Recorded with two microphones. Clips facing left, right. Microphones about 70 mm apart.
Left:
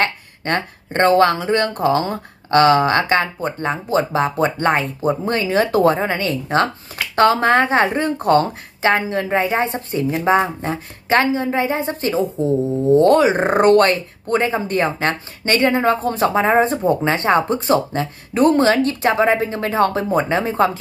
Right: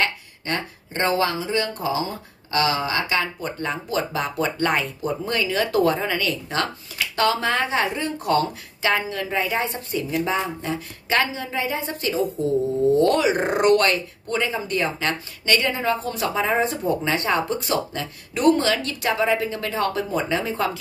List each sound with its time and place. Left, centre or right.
0.0 s speech: left
3.3 s speech: left